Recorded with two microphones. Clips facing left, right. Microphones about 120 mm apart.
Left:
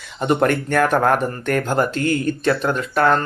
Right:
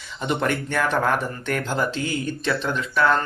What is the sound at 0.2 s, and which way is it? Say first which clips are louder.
Speech: left 6 dB; 50° left (ahead or behind).